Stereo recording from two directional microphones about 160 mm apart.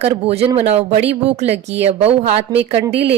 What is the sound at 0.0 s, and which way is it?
Speech, 40° right (ahead or behind).